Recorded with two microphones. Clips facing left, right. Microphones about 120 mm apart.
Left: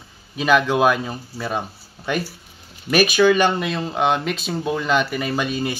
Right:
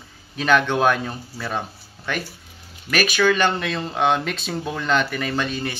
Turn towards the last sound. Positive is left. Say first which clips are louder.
# left 2 dB
turn(degrees=10)  # may be behind; listen again after turning